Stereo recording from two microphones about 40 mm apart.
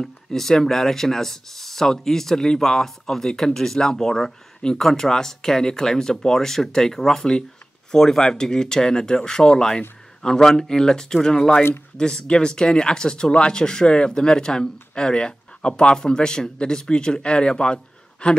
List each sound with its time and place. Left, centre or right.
0.0 s speech: centre